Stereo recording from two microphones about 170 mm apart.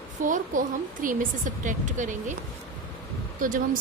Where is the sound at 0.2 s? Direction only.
50° right (ahead or behind).